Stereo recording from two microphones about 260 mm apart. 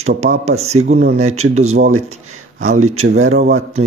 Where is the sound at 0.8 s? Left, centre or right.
Right.